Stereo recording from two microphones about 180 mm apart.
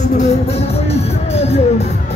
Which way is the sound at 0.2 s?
35° left (ahead or behind).